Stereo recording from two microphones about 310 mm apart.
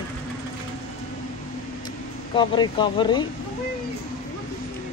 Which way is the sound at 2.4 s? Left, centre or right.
Centre.